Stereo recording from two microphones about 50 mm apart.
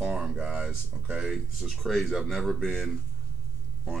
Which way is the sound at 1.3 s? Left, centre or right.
Centre.